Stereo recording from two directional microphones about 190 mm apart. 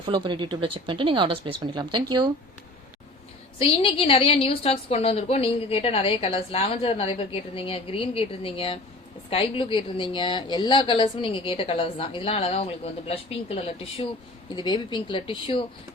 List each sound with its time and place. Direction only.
0.0 s speech: 25° right (ahead or behind)
3.6 s a woman's voice: 30° left (ahead or behind)